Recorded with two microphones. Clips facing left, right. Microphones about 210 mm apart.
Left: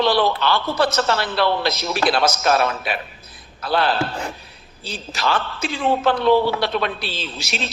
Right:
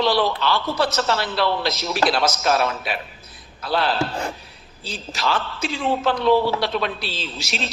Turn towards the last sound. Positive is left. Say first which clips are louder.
# left 1 dB
turn(degrees=55)  # may be behind; listen again after turning